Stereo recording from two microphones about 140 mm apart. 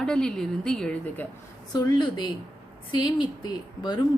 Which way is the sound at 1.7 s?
30° left (ahead or behind).